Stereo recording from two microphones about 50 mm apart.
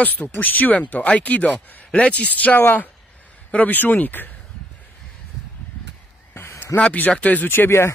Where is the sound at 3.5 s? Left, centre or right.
Left.